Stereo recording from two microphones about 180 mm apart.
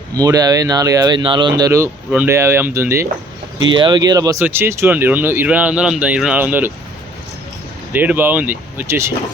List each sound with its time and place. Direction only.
0.2 s speech: 20° right (ahead or behind)
3.7 s speech: 25° right (ahead or behind); by 6.7 s 10° right (ahead or behind)
7.9 s speech: 10° right (ahead or behind)